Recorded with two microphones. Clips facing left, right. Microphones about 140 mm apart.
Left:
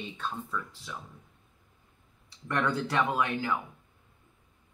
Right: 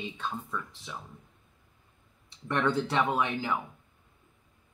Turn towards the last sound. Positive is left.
turn(degrees=-25)  # may be behind; listen again after turning